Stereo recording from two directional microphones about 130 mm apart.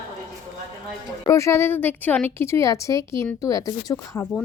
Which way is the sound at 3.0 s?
40° right (ahead or behind).